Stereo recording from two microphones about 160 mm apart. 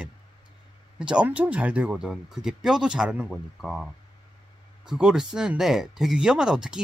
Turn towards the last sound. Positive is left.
turn(degrees=-5)  # may be behind; listen again after turning